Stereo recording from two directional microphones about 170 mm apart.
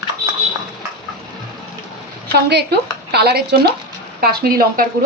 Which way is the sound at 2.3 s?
75° right (ahead or behind).